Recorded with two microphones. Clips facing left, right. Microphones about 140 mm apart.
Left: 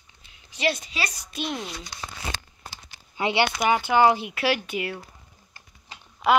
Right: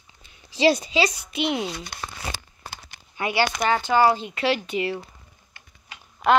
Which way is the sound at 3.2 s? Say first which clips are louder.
Even; 20° left (ahead or behind).